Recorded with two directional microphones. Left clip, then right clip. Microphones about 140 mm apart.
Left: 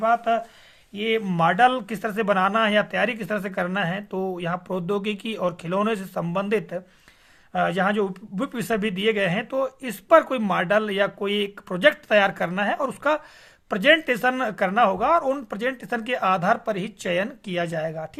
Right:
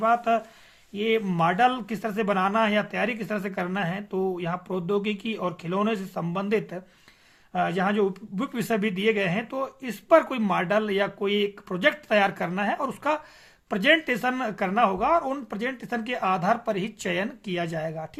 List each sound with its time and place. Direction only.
0.0 s speech: 10° left (ahead or behind)
0.9 s speech: 20° left (ahead or behind)